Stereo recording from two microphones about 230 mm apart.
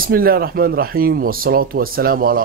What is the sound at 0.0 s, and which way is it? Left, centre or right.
Speech, right.